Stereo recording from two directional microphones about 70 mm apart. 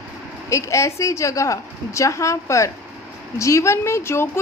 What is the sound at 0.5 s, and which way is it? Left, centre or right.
A woman's voice, left.